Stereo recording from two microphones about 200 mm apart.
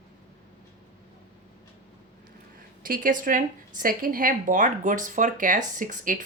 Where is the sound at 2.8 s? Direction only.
45° right (ahead or behind).